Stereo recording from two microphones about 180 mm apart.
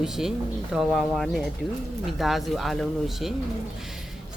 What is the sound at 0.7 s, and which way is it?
Speech, centre (ahead or behind).